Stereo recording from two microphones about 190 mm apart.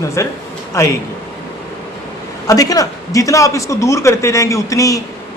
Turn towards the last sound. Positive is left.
turn(degrees=15)  # may be behind; listen again after turning